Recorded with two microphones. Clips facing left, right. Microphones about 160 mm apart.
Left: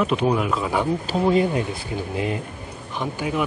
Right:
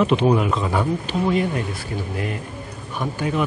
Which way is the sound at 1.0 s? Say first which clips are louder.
Left 2 dB; 30° left (ahead or behind).